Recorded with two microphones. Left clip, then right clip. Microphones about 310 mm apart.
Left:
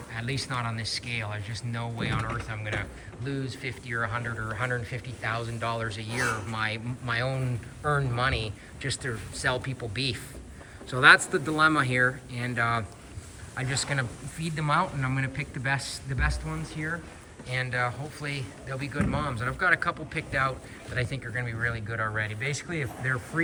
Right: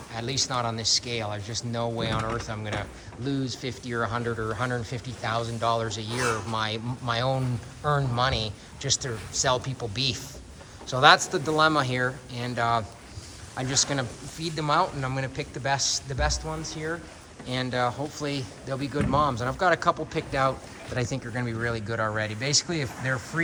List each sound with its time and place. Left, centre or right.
0.1 s speech: centre
17.5 s speech: centre